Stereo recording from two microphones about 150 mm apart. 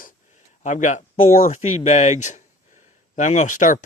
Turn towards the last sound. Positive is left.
turn(degrees=60)  # may be behind; listen again after turning